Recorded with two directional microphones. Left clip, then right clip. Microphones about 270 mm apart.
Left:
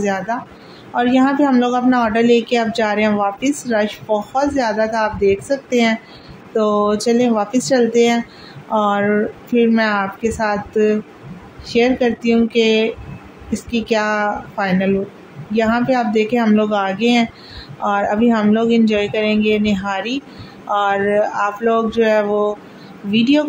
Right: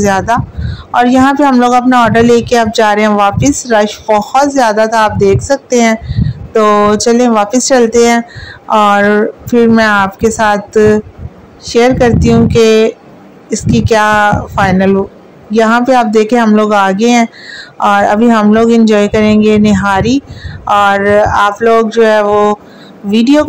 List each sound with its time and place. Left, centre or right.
0.0 s speech: right